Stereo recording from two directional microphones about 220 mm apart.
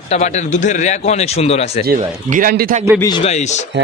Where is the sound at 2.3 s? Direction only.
40° right (ahead or behind).